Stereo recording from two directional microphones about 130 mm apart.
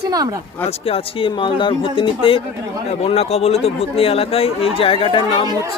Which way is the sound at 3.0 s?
55° left (ahead or behind).